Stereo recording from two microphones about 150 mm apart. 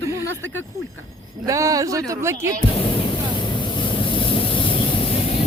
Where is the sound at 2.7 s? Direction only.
35° left (ahead or behind).